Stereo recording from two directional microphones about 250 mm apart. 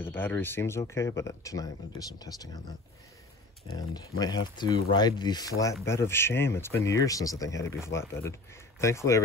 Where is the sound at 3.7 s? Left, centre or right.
Centre.